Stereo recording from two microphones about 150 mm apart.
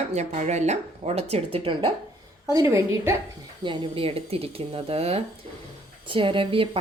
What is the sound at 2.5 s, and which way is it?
Speech, 20° right (ahead or behind).